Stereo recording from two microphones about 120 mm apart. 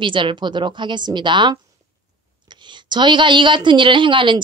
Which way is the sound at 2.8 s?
40° right (ahead or behind).